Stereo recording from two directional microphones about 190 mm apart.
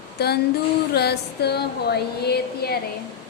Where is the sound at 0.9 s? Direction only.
60° left (ahead or behind).